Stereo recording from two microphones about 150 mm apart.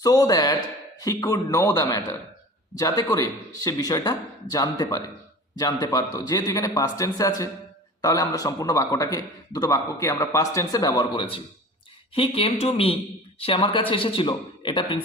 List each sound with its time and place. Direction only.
0.0 s a man's voice: 25° left (ahead or behind)